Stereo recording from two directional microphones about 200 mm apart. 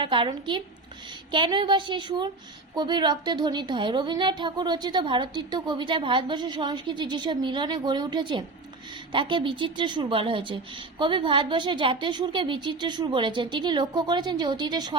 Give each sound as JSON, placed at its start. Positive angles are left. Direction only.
{"t": 0.0, "sound": "speech", "side_deg": -25}